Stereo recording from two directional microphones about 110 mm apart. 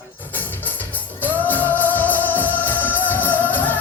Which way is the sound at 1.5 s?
15° left (ahead or behind).